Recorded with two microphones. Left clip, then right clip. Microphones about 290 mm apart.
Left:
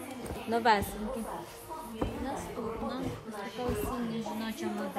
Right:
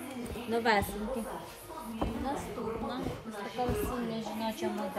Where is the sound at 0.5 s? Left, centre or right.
Centre.